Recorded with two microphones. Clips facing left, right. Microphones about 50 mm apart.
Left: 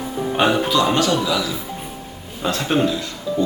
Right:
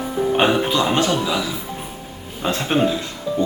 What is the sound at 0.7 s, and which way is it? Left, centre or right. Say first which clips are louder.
A man's voice: left 1 dB; right.